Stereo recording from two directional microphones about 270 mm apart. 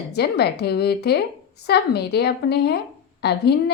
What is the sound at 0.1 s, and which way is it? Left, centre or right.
A woman's voice, left.